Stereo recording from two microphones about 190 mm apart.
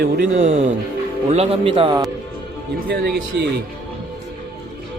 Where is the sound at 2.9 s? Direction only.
60° right (ahead or behind).